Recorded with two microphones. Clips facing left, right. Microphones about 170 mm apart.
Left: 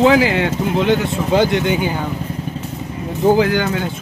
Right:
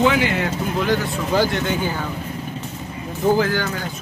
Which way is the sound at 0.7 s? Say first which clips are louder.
Left 5 dB; 20° left (ahead or behind).